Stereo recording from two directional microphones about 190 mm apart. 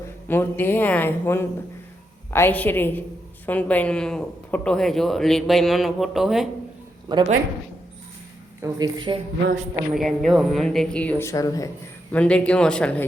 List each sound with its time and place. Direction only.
0.3 s a woman's voice: 10° left (ahead or behind)
7.1 s a woman's voice: 20° right (ahead or behind)
8.6 s a woman's voice: 20° right (ahead or behind)
9.9 s speech: centre (ahead or behind); by 11.7 s 20° left (ahead or behind)
12.1 s speech: 5° left (ahead or behind)